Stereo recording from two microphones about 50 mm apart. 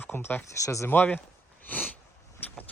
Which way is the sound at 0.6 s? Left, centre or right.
Left.